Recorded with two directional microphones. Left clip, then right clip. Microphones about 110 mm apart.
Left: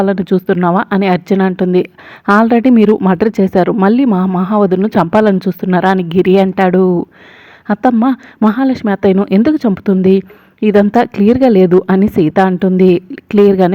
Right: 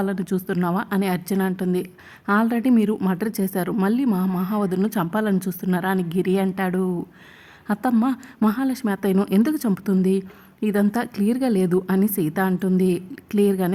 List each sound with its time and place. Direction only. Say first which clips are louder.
0.0 s a woman's voice: left 13 dB; 50° left (ahead or behind)